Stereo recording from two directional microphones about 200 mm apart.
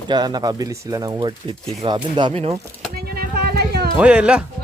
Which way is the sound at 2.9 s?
50° right (ahead or behind).